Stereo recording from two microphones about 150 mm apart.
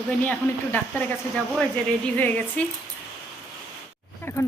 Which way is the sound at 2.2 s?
10° left (ahead or behind).